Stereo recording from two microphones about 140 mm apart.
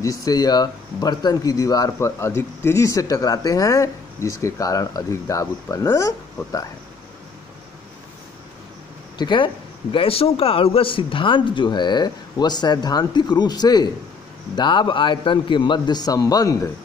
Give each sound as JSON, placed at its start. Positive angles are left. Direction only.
{"t": 0.0, "sound": "speech", "side_deg": 25}
{"t": 9.2, "sound": "speech", "side_deg": 35}